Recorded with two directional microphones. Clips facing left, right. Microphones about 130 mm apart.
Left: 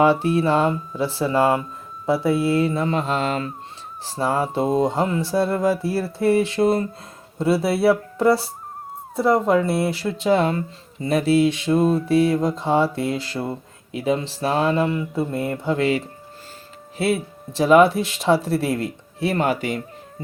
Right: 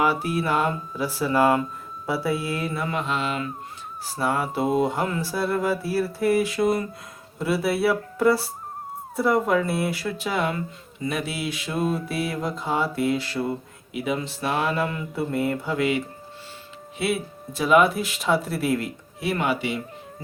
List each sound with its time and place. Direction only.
0.0 s speech: 25° left (ahead or behind)
4.0 s speech: 30° left (ahead or behind); by 19.8 s 45° left (ahead or behind)